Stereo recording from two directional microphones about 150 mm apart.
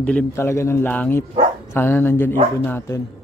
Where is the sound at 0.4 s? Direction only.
20° left (ahead or behind).